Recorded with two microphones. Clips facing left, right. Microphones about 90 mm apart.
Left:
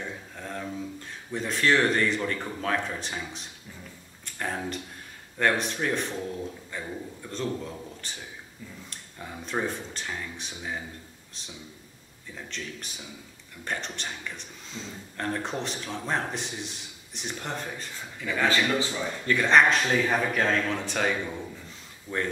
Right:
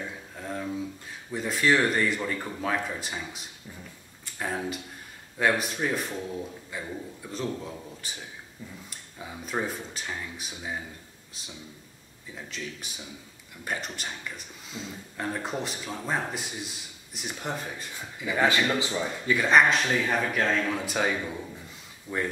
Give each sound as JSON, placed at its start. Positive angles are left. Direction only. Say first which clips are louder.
{"t": 0.0, "sound": "a sound", "louder": "even", "side_deg": -5}
{"t": 1.3, "sound": "a man's voice", "louder": "even", "side_deg": -5}
{"t": 12.4, "sound": "speech", "louder": "even", "side_deg": -5}
{"t": 22.1, "sound": "a man's voice", "louder": "even", "side_deg": -15}